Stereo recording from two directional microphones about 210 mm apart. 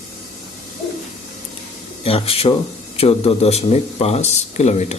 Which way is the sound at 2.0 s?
25° left (ahead or behind).